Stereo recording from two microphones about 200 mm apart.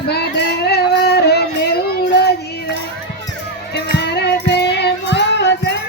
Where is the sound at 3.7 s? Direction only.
55° left (ahead or behind).